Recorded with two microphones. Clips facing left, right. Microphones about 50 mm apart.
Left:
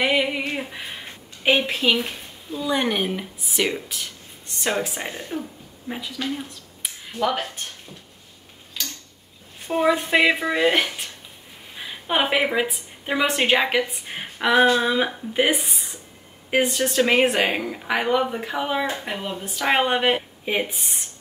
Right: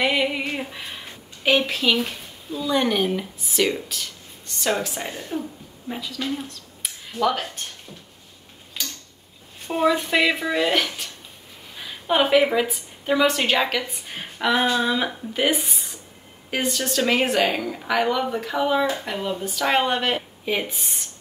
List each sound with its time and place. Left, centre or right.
0.0 s a woman's voice: centre
9.8 s a woman's voice: centre
16.4 s a woman's voice: centre
20.7 s speech: centre